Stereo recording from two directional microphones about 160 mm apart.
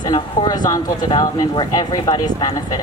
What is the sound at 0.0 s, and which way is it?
A woman's voice, 25° left (ahead or behind).